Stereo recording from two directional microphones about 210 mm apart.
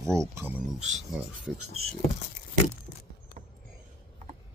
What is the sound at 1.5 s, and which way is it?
Speech, 85° right.